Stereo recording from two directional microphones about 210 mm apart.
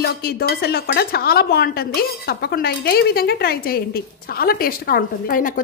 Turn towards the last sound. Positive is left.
turn(degrees=40)  # may be behind; listen again after turning